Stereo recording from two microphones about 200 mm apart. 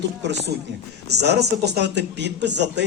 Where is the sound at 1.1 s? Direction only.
55° right (ahead or behind).